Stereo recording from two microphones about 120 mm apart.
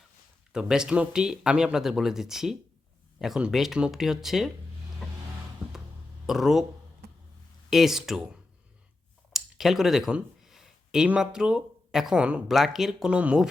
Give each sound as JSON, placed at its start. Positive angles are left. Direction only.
{"t": 0.5, "sound": "speech", "side_deg": -5}
{"t": 6.2, "sound": "speech", "side_deg": 0}
{"t": 7.7, "sound": "speech", "side_deg": 0}